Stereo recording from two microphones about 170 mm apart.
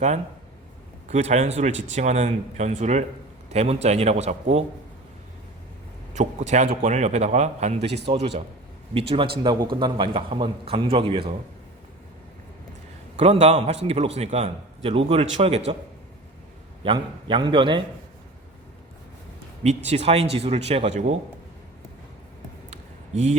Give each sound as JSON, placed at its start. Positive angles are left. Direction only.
{"t": 1.0, "sound": "a man's voice", "side_deg": -40}
{"t": 6.1, "sound": "a man's voice", "side_deg": -45}
{"t": 8.0, "sound": "speech", "side_deg": -30}
{"t": 13.1, "sound": "speech", "side_deg": -40}
{"t": 16.8, "sound": "a man's voice", "side_deg": -30}
{"t": 19.6, "sound": "speech", "side_deg": -40}
{"t": 22.7, "sound": "a sound", "side_deg": -40}